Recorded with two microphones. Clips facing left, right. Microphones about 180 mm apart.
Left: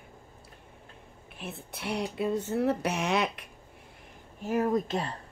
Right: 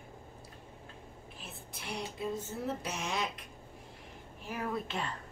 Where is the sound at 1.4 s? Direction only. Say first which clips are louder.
Left 10 dB; 65° left (ahead or behind).